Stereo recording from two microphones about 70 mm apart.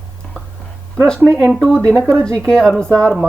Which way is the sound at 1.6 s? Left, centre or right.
Centre.